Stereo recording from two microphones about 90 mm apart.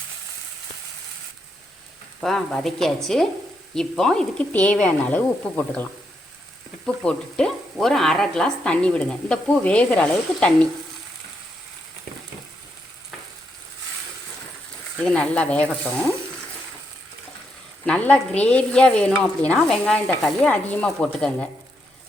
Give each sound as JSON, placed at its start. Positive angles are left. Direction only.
{"t": 2.2, "sound": "speech", "side_deg": 5}
{"t": 15.0, "sound": "speech", "side_deg": 15}
{"t": 17.8, "sound": "speech", "side_deg": 15}